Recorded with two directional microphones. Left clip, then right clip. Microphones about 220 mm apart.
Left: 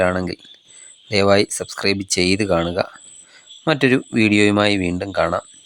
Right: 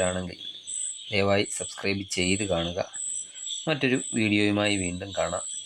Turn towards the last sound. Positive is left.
turn(degrees=25)  # may be behind; listen again after turning